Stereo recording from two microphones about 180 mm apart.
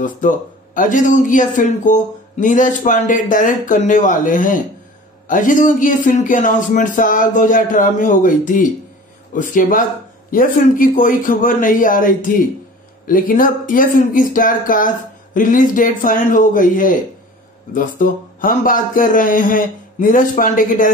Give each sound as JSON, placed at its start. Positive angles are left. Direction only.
{"t": 0.7, "sound": "speech", "side_deg": 45}